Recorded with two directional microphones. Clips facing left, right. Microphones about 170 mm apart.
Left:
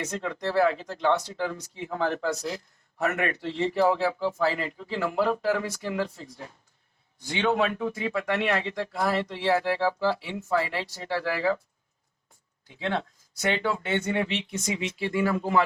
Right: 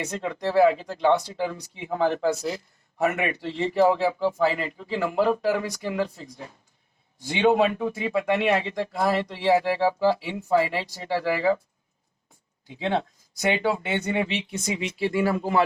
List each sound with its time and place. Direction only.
0.0 s speech: 15° right (ahead or behind)
12.6 s speech: 20° right (ahead or behind)